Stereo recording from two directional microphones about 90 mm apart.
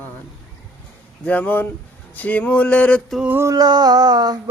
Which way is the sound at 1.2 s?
15° left (ahead or behind).